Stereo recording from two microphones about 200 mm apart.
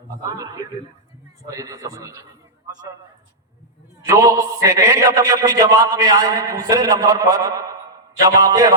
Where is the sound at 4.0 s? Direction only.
15° right (ahead or behind).